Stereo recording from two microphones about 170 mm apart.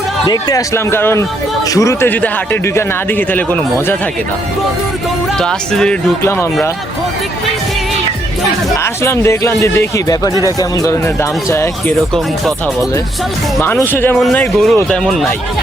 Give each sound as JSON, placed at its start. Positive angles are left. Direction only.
{"t": 0.3, "sound": "a man's voice", "side_deg": 20}
{"t": 5.4, "sound": "speech", "side_deg": 5}
{"t": 6.2, "sound": "a man's voice", "side_deg": 15}
{"t": 8.8, "sound": "a man's voice", "side_deg": 15}
{"t": 13.6, "sound": "a man's voice", "side_deg": 15}
{"t": 14.2, "sound": "speech", "side_deg": 0}